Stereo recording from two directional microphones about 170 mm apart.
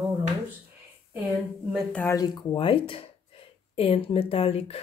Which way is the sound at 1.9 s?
20° left (ahead or behind).